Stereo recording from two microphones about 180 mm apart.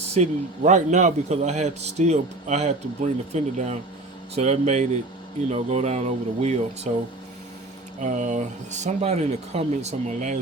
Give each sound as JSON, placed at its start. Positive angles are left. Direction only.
{"t": 0.1, "sound": "a man's voice", "side_deg": -40}
{"t": 8.0, "sound": "a man's voice", "side_deg": -45}